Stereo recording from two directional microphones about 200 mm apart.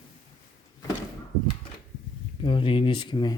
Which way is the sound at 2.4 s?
25° left (ahead or behind).